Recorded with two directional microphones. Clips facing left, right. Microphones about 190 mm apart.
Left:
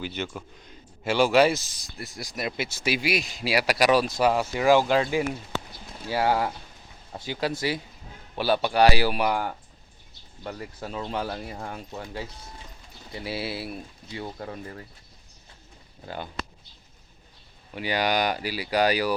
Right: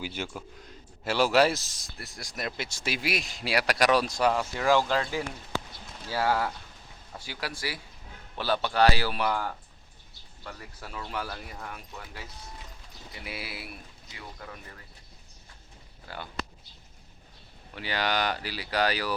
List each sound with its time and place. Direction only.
0.0 s speech: 10° right (ahead or behind)
4.3 s speech: 15° left (ahead or behind)
8.4 s speech: 15° left (ahead or behind)
10.4 s speech: 30° left (ahead or behind)
16.0 s speech: 20° left (ahead or behind)
17.7 s speech: 15° left (ahead or behind)